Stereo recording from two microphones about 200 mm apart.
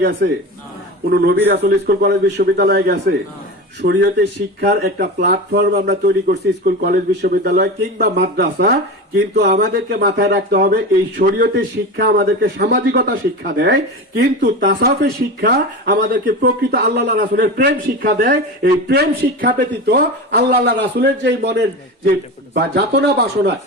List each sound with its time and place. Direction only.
1.1 s speech: 50° right (ahead or behind)
14.4 s speech: 60° right (ahead or behind)